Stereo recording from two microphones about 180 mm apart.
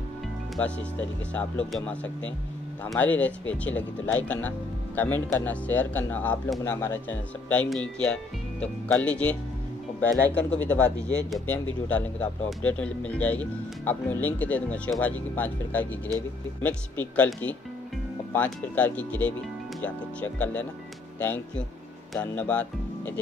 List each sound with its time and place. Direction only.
0.6 s speech: 5° left (ahead or behind)
17.0 s speech: 10° left (ahead or behind)